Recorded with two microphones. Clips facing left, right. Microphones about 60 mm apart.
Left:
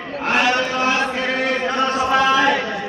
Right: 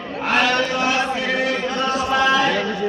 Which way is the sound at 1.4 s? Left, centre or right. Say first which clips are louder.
Left 2 dB; left.